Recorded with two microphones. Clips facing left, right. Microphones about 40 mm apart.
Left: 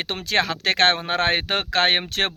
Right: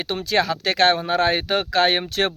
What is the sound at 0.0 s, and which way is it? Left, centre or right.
Speech, left.